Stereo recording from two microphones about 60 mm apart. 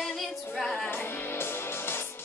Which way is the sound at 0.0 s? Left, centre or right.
Centre.